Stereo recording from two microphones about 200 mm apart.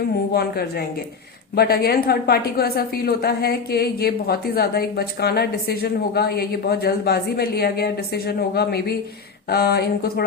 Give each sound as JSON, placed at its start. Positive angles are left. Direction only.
{"t": 0.3, "sound": "a woman's voice", "side_deg": 50}